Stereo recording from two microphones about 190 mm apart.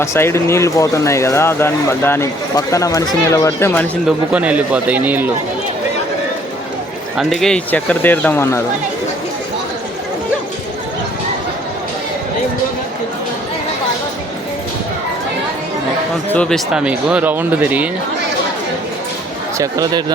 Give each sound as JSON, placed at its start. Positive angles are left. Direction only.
{"t": 0.0, "sound": "speech", "side_deg": 15}
{"t": 4.0, "sound": "speech", "side_deg": -5}
{"t": 7.2, "sound": "speech", "side_deg": 0}
{"t": 16.3, "sound": "speech", "side_deg": 5}
{"t": 19.5, "sound": "speech", "side_deg": -20}